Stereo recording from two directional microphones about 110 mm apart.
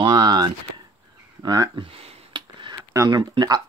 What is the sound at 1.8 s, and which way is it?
Speech, 60° right (ahead or behind).